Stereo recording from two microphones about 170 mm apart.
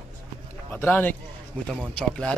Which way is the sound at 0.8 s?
10° left (ahead or behind).